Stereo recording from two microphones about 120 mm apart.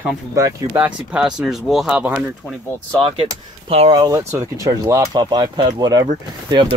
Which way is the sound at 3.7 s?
55° right (ahead or behind).